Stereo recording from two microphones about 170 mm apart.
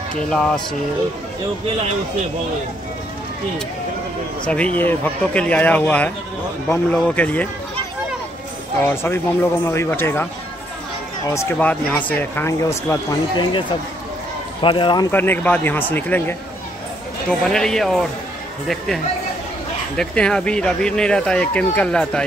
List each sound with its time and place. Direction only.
0.3 s speech: 5° left (ahead or behind)
4.5 s speech: 5° left (ahead or behind)
8.8 s speech: 15° left (ahead or behind)
11.2 s speech: 15° left (ahead or behind)
13.5 s a man's voice: 30° left (ahead or behind)
15.0 s speech: 10° left (ahead or behind)
17.4 s speech: 5° left (ahead or behind)
20.0 s speech: 5° left (ahead or behind)